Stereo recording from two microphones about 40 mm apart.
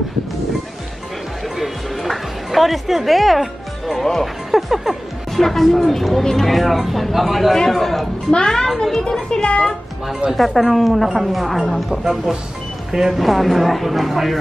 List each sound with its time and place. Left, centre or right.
1.6 s music: centre
4.5 s music: centre
5.4 s a woman's voice: centre
8.3 s a child's voice: centre
10.3 s a woman's voice: centre
13.2 s a woman's voice: centre